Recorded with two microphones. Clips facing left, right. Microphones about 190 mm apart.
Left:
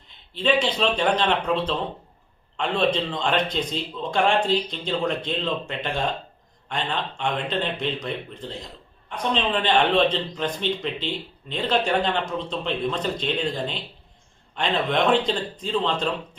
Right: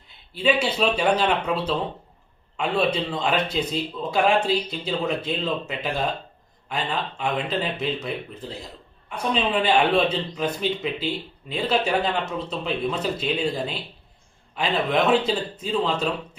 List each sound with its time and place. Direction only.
0.3 s a man's voice: 10° right (ahead or behind)